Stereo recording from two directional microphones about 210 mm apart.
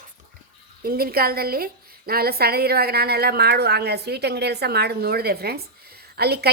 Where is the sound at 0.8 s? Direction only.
45° right (ahead or behind).